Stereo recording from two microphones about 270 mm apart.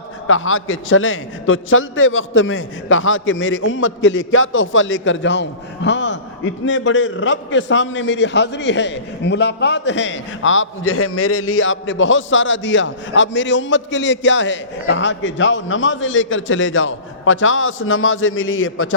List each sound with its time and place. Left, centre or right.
0.3 s a man's voice: left